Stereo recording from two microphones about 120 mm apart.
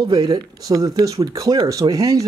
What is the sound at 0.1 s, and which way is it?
Speech, 35° right (ahead or behind).